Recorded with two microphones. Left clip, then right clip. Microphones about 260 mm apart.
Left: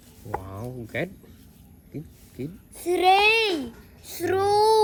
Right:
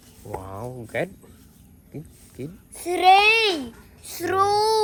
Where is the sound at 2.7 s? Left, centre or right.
Right.